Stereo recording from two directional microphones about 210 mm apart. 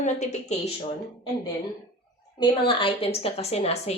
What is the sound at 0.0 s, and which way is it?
Speech, 35° left (ahead or behind).